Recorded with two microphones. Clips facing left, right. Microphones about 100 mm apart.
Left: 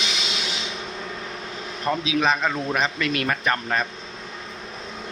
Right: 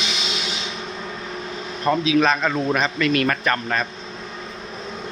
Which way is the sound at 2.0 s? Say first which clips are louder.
Right 2 dB; 15° left (ahead or behind).